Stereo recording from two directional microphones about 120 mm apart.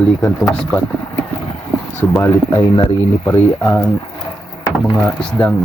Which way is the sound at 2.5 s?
40° left (ahead or behind).